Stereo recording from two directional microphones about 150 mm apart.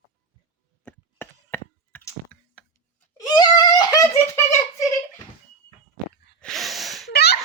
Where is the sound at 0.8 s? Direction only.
10° left (ahead or behind).